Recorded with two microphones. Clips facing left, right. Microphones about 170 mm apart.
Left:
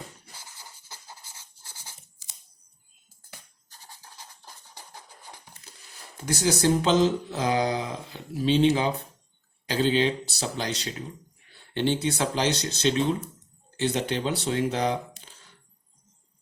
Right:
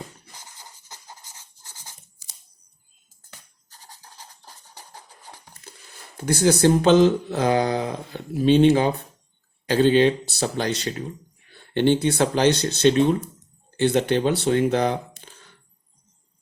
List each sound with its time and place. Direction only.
6.1 s speech: 55° right (ahead or behind)